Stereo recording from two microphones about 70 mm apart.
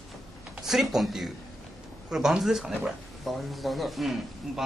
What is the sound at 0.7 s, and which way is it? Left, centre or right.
Speech, centre.